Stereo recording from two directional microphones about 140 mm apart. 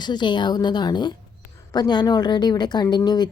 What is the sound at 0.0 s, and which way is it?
Speech, 30° left (ahead or behind).